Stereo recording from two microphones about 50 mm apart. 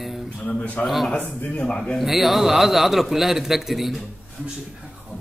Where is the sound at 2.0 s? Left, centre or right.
Centre.